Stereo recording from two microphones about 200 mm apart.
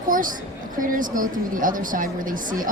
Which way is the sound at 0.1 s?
40° right (ahead or behind).